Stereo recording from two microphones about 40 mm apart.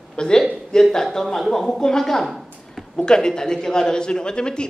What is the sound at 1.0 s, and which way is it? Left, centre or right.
A man's voice, centre.